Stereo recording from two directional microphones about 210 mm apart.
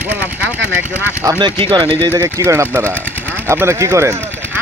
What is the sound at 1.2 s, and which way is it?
Speech, 20° right (ahead or behind).